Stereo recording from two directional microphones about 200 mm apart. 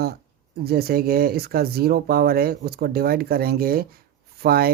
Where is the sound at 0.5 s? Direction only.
50° right (ahead or behind).